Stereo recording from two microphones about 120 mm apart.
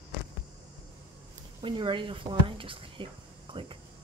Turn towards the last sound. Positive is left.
turn(degrees=-45)  # may be behind; listen again after turning